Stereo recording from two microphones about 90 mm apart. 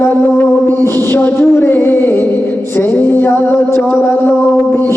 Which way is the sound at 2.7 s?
25° left (ahead or behind).